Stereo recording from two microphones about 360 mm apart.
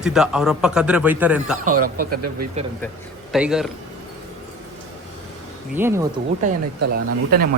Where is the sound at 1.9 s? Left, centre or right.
Right.